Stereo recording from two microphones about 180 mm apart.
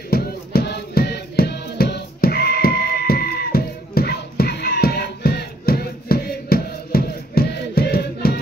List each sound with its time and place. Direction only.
0.1 s music: 55° left (ahead or behind)